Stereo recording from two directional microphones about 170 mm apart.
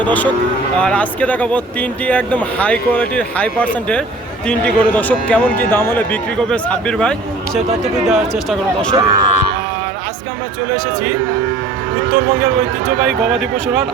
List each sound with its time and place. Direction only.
0.0 s speech: 10° left (ahead or behind)
9.0 s speech: 25° right (ahead or behind)